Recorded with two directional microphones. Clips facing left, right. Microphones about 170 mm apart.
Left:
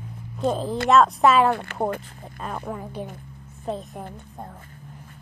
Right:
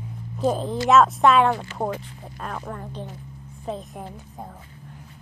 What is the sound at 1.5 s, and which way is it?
Speech, 60° left (ahead or behind).